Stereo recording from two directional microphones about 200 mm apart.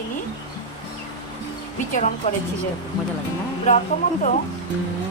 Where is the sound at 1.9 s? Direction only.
35° left (ahead or behind).